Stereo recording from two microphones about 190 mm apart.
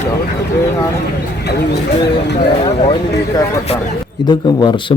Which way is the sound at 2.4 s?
25° left (ahead or behind).